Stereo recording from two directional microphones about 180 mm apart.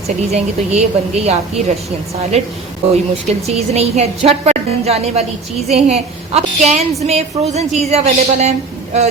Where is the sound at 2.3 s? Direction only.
35° right (ahead or behind).